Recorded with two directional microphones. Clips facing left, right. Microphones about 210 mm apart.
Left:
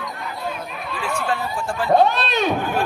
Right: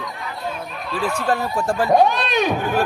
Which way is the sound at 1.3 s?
40° right (ahead or behind).